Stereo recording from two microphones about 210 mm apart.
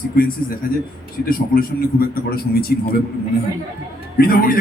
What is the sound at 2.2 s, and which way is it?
Speech, 45° left (ahead or behind).